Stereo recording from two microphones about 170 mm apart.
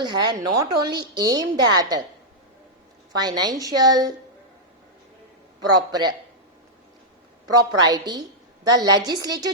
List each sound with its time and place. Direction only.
0.0 s a woman's voice: 25° right (ahead or behind)
3.2 s a woman's voice: 25° right (ahead or behind)
5.7 s a woman's voice: 25° right (ahead or behind)
7.4 s a woman's voice: 25° right (ahead or behind)